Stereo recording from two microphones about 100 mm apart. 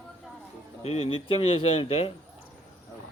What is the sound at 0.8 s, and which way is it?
Speech, 80° left.